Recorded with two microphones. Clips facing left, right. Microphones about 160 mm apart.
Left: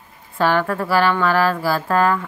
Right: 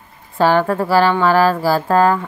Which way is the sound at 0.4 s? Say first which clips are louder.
Right 4 dB; 30° right (ahead or behind).